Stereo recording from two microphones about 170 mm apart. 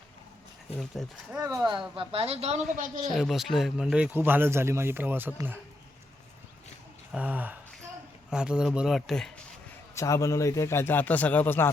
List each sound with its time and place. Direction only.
0.8 s speech: centre (ahead or behind)
2.0 s a woman's voice: 35° right (ahead or behind)
3.1 s a man's voice: centre (ahead or behind)
7.1 s speech: 10° right (ahead or behind)
9.9 s a man's voice: 20° left (ahead or behind)